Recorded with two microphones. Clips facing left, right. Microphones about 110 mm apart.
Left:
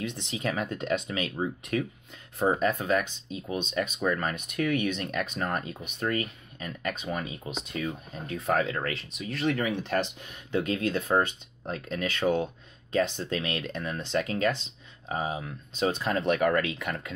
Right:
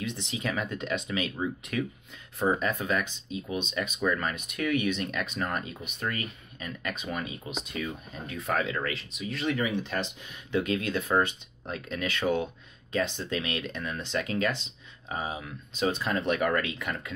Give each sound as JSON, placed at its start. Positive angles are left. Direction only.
{"t": 0.0, "sound": "speech", "side_deg": 50}
{"t": 10.5, "sound": "speech", "side_deg": 40}